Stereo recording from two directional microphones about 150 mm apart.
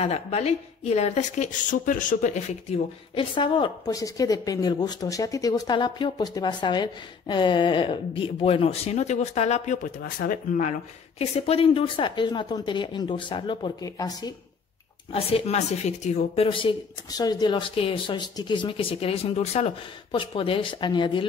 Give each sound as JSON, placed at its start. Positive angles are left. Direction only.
{"t": 0.0, "sound": "speech", "side_deg": 45}
{"t": 3.2, "sound": "a woman's voice", "side_deg": 35}
{"t": 11.1, "sound": "a woman's voice", "side_deg": 45}
{"t": 15.1, "sound": "speech", "side_deg": 40}
{"t": 16.4, "sound": "a woman's voice", "side_deg": 35}